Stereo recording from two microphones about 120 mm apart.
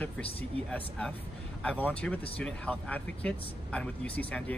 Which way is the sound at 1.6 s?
15° left (ahead or behind).